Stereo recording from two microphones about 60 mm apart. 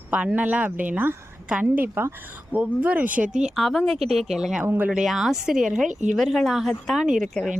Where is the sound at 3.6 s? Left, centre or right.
Centre.